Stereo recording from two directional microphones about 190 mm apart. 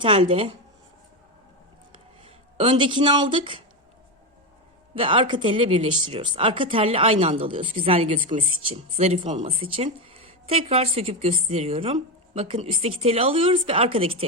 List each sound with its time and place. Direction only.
0.0 s speech: 25° right (ahead or behind)
2.2 s speech: 30° right (ahead or behind)
4.9 s a woman's voice: 30° right (ahead or behind)